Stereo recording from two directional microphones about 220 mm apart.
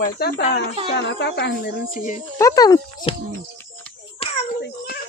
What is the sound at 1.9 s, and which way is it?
Speech, 35° left (ahead or behind).